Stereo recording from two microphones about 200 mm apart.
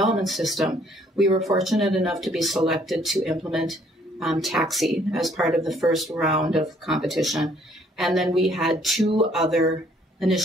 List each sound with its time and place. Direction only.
0.0 s speech: centre (ahead or behind)